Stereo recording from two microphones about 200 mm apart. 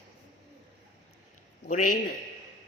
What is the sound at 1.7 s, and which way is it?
Speech, 40° left (ahead or behind).